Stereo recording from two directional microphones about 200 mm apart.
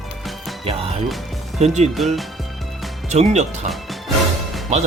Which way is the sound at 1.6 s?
35° right (ahead or behind).